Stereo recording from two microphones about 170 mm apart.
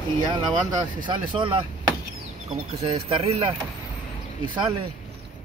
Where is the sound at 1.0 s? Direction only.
30° right (ahead or behind).